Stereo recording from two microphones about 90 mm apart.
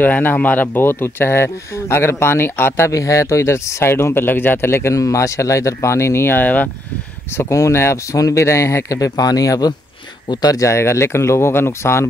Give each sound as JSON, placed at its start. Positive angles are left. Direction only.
{"t": 0.0, "sound": "speech", "side_deg": 20}
{"t": 2.9, "sound": "speech", "side_deg": 35}
{"t": 7.3, "sound": "speech", "side_deg": 35}